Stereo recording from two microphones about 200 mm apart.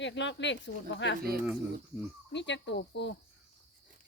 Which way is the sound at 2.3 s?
60° left (ahead or behind).